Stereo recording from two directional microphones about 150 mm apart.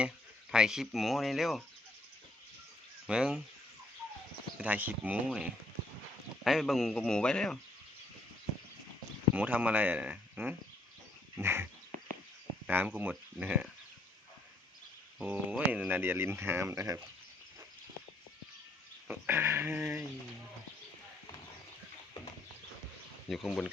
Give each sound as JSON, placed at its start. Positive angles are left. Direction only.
{"t": 0.5, "sound": "a man's voice", "side_deg": -5}
{"t": 3.1, "sound": "speech", "side_deg": -5}
{"t": 4.5, "sound": "a man's voice", "side_deg": -10}
{"t": 9.3, "sound": "speech", "side_deg": -10}
{"t": 15.2, "sound": "speech", "side_deg": -10}
{"t": 19.0, "sound": "speech", "side_deg": -10}
{"t": 23.3, "sound": "a man's voice", "side_deg": 0}